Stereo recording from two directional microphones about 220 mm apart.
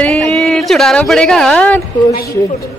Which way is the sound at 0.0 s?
Centre (ahead or behind).